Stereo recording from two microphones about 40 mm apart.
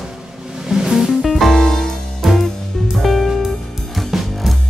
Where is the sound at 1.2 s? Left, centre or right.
Centre.